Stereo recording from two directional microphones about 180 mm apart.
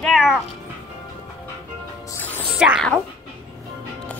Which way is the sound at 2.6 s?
5° right (ahead or behind).